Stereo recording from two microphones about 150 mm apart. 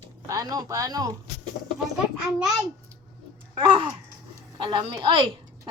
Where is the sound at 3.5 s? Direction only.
35° right (ahead or behind).